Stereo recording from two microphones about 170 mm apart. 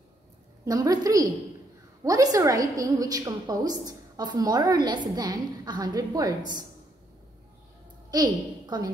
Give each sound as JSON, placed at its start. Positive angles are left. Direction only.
{"t": 0.7, "sound": "a woman's voice", "side_deg": -20}
{"t": 8.1, "sound": "a woman's voice", "side_deg": -25}